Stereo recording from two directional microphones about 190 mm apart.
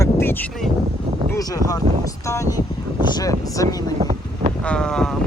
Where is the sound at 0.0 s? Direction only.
10° left (ahead or behind).